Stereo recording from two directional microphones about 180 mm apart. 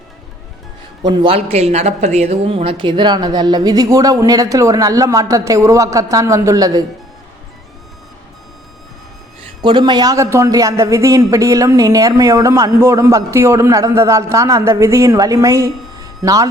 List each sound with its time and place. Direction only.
1.0 s a woman's voice: 25° right (ahead or behind)
9.6 s speech: 25° right (ahead or behind)